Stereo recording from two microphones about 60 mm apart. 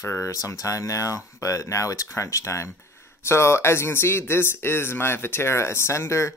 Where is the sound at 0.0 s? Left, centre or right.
Left.